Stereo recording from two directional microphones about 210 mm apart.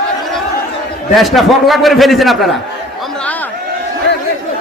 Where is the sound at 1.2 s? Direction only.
Centre (ahead or behind).